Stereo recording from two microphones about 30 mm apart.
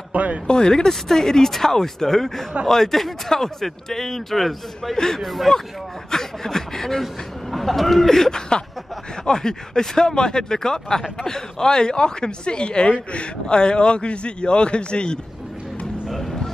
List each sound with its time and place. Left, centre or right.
0.1 s a sound: right
0.5 s speech: left
0.8 s a man's voice: centre
5.2 s speech: centre
6.0 s speech: centre
7.5 s speech: centre
8.3 s a sound: left
9.2 s speech: left
16.1 s music: centre